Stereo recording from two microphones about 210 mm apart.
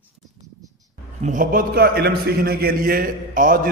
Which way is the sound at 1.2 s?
40° right (ahead or behind).